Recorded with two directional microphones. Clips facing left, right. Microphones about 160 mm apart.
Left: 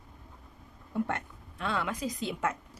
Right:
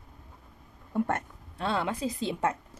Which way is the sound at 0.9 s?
45° right (ahead or behind).